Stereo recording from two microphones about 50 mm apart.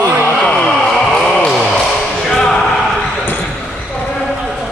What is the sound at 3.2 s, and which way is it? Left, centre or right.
Basketball bounce, left.